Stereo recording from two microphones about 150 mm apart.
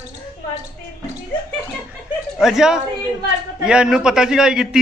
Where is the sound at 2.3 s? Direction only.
5° right (ahead or behind).